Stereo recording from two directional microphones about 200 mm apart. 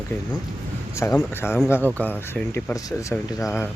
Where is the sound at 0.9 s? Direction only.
15° left (ahead or behind).